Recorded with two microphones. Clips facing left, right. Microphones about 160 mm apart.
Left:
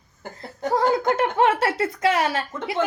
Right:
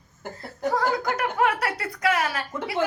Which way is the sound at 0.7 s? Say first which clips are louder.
Left 6 dB; 25° left (ahead or behind).